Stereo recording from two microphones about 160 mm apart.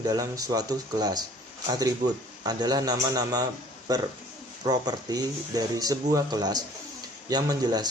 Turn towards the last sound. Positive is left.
turn(degrees=-25)  # may be behind; listen again after turning